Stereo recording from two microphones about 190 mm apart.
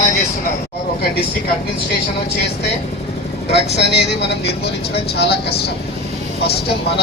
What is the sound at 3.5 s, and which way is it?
Speech, 60° left (ahead or behind).